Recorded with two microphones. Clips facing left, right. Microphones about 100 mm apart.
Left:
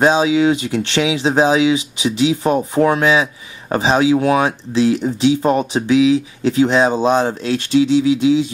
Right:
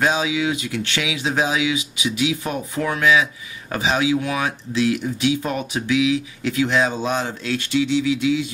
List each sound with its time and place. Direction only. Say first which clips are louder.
0.0 s speech: left 7 dB; 30° left (ahead or behind)